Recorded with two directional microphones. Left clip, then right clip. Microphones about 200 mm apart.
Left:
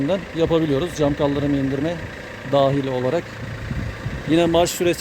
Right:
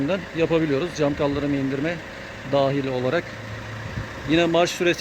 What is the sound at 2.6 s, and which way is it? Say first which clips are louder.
Speech: left 3 dB; 5° left (ahead or behind).